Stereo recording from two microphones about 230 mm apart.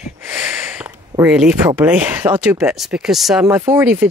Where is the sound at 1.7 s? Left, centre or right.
Centre.